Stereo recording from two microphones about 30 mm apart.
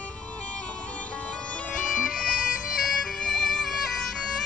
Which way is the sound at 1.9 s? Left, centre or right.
Centre.